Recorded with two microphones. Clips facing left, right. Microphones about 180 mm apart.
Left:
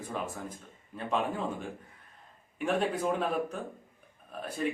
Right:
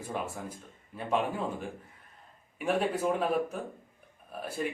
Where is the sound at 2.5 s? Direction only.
5° right (ahead or behind).